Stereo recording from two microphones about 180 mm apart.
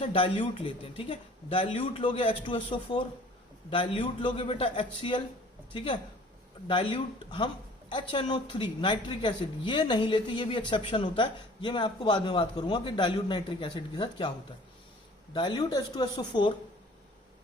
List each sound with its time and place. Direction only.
0.0 s speech: 30° left (ahead or behind)
15.3 s speech: 25° left (ahead or behind)